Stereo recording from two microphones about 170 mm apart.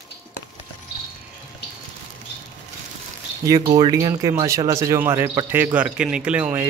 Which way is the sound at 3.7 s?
20° right (ahead or behind).